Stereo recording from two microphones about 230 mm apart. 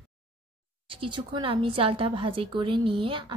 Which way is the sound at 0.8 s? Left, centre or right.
Right.